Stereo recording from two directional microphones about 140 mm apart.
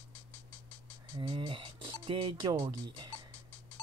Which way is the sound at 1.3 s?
35° right (ahead or behind).